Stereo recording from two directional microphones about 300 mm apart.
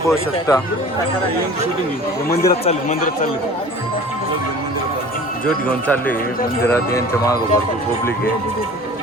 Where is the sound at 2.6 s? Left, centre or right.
Left.